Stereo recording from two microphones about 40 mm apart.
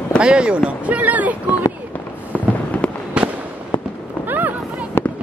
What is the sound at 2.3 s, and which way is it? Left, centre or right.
Fireworks, left.